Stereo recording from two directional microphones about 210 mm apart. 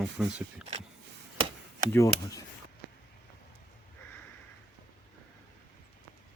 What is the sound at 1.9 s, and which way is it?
Speech, 15° left (ahead or behind).